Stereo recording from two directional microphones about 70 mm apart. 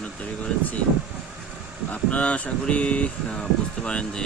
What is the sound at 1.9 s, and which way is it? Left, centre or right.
Speech, left.